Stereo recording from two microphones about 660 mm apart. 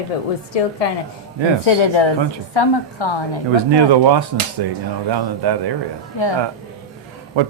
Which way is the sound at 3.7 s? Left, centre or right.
Right.